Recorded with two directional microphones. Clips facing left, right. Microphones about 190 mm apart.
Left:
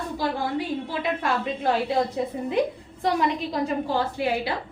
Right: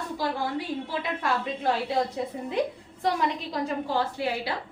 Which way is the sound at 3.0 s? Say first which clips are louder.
Left 3 dB; 15° left (ahead or behind).